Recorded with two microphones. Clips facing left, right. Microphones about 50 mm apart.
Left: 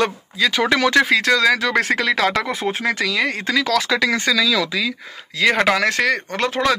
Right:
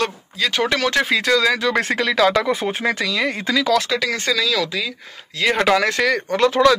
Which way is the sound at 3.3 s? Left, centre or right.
Left.